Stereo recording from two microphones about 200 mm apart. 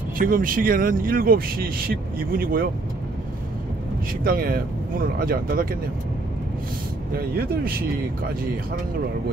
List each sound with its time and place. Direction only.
0.2 s speech: 45° right (ahead or behind)
4.2 s speech: 45° right (ahead or behind)
7.2 s speech: 50° right (ahead or behind)